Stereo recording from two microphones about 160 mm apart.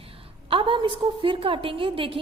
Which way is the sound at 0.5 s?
30° right (ahead or behind).